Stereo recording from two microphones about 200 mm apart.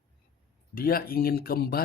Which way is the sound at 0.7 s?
45° left (ahead or behind).